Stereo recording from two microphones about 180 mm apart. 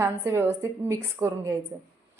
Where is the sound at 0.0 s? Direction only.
15° right (ahead or behind).